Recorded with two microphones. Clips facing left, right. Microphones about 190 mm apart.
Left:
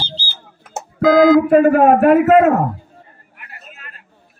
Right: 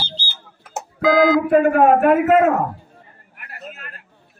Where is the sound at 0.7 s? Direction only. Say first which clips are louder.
Left 4 dB; centre (ahead or behind).